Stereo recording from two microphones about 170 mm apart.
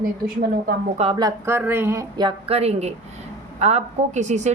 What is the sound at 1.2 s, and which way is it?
A woman's voice, 15° right (ahead or behind).